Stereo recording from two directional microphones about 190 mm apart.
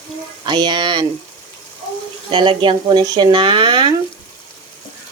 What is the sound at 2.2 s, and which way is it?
Speech, 25° right (ahead or behind).